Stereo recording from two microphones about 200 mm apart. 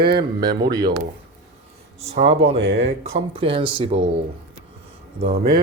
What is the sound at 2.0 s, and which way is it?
Speech, 30° right (ahead or behind).